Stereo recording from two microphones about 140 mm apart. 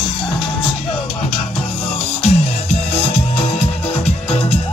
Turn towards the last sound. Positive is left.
turn(degrees=45)  # may be behind; listen again after turning